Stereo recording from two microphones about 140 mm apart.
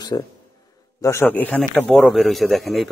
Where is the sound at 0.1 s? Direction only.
25° left (ahead or behind).